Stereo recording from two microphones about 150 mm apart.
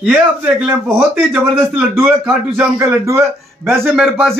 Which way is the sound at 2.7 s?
20° right (ahead or behind).